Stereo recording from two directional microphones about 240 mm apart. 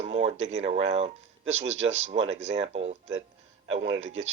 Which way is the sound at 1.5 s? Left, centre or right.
Right.